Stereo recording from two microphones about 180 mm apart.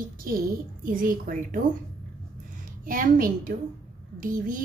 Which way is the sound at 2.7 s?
50° right (ahead or behind).